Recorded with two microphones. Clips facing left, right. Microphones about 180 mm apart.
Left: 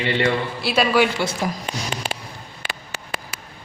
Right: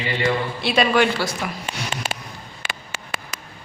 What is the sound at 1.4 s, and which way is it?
Speech, 35° left (ahead or behind).